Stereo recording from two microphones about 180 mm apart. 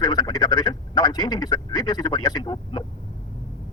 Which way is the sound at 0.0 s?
20° left (ahead or behind).